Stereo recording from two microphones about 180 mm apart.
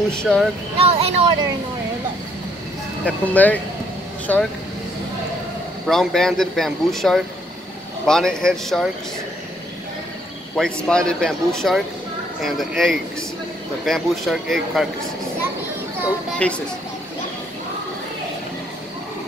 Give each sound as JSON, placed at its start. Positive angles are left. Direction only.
{"t": 0.1, "sound": "speech", "side_deg": 5}
{"t": 0.7, "sound": "speech", "side_deg": -35}
{"t": 3.1, "sound": "speech", "side_deg": 10}
{"t": 5.9, "sound": "speech", "side_deg": 0}
{"t": 10.5, "sound": "speech", "side_deg": 5}
{"t": 16.3, "sound": "speech", "side_deg": 5}